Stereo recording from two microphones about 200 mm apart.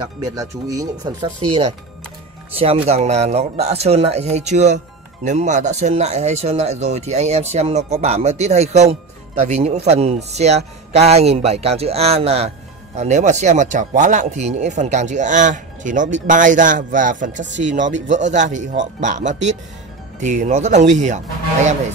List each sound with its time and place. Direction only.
0.0 s speech: 20° right (ahead or behind)
1.5 s speech: 30° right (ahead or behind)